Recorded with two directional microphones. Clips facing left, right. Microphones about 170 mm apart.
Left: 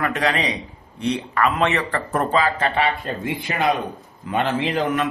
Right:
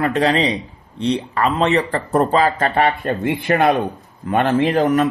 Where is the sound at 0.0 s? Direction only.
30° right (ahead or behind).